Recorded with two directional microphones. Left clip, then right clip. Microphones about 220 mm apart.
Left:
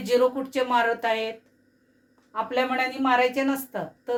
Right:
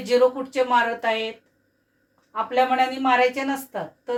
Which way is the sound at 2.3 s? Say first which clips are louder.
Right 5 dB; 25° left (ahead or behind).